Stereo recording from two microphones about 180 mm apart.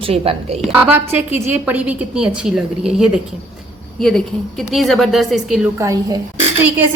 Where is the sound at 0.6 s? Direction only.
10° right (ahead or behind).